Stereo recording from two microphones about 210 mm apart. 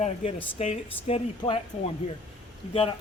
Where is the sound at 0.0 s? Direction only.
35° left (ahead or behind).